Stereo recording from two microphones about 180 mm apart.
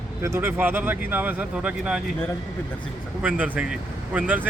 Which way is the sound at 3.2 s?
10° right (ahead or behind).